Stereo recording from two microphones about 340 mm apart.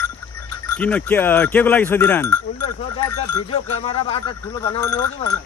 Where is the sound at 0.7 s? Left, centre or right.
Centre.